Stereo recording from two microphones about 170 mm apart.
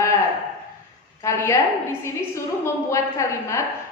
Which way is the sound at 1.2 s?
15° left (ahead or behind).